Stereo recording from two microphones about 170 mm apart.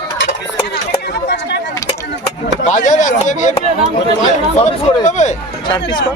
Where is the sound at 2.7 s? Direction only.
45° left (ahead or behind).